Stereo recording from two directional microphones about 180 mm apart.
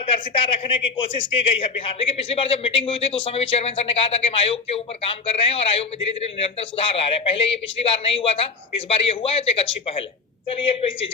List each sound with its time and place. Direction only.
0.1 s a man's voice: 30° left (ahead or behind)